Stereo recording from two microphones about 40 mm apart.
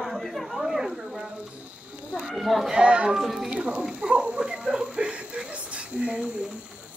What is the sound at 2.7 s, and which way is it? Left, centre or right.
Speech, right.